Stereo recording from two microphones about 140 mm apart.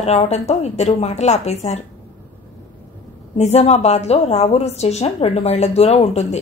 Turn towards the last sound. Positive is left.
turn(degrees=50)  # may be behind; listen again after turning